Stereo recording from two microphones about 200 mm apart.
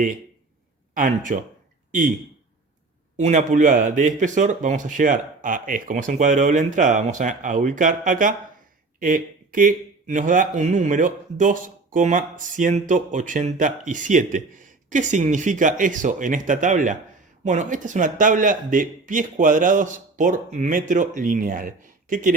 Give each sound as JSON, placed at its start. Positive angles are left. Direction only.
{"t": 0.9, "sound": "a man's voice", "side_deg": -40}
{"t": 3.2, "sound": "speech", "side_deg": -35}